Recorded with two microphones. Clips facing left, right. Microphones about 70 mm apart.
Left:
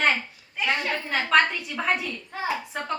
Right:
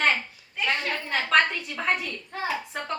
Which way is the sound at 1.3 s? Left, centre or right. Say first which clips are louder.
Left 1 dB; centre.